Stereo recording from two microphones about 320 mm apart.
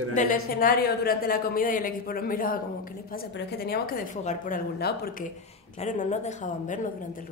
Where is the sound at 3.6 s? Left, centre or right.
Left.